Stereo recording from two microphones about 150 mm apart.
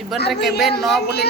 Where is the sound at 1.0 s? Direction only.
90° left.